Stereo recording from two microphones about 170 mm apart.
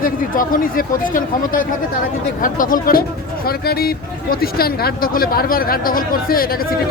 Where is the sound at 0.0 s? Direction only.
55° left (ahead or behind).